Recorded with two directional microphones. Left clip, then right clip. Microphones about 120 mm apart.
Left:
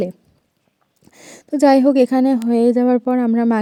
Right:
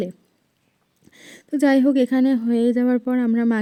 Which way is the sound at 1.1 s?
35° left (ahead or behind).